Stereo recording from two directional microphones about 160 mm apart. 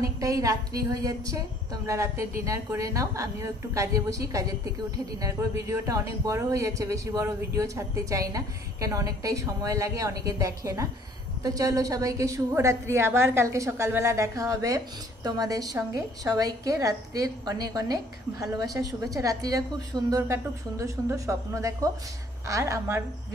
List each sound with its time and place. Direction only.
0.0 s a woman's voice: 20° right (ahead or behind)